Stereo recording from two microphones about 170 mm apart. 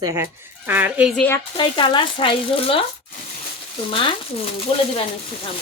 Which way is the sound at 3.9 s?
30° left (ahead or behind).